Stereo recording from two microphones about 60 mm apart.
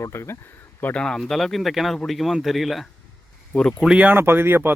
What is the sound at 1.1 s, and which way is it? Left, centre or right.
Speech, centre.